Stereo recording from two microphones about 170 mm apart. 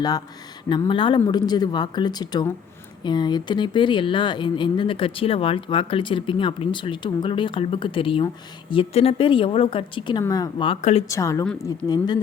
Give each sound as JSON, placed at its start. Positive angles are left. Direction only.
{"t": 0.7, "sound": "speech", "side_deg": 30}
{"t": 10.8, "sound": "speech", "side_deg": 40}
{"t": 11.1, "sound": "a woman's voice", "side_deg": 20}